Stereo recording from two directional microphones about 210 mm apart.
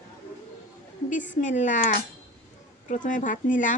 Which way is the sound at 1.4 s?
35° left (ahead or behind).